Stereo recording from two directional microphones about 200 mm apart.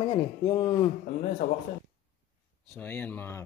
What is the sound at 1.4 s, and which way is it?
Speech, 45° left (ahead or behind).